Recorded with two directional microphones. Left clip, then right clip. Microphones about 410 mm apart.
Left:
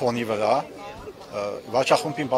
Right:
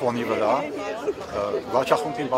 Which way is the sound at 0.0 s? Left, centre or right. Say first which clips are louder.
Even; left.